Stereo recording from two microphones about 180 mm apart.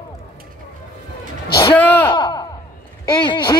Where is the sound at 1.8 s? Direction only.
10° left (ahead or behind).